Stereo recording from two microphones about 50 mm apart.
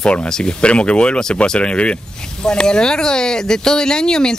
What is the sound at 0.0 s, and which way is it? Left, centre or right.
Speech, left.